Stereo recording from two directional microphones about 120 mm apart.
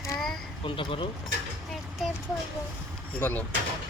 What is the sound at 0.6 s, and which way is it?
Speech, 45° left (ahead or behind).